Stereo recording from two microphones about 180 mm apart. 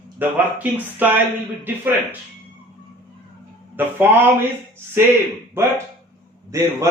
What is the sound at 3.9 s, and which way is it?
Speech, 10° right (ahead or behind).